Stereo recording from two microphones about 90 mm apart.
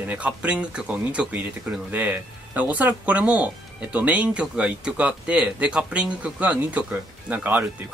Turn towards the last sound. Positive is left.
turn(degrees=-20)  # may be behind; listen again after turning